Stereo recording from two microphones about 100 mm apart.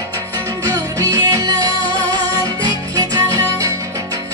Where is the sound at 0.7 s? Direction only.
35° right (ahead or behind).